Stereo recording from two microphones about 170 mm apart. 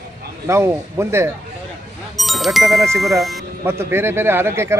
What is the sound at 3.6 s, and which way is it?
Speech, 15° right (ahead or behind).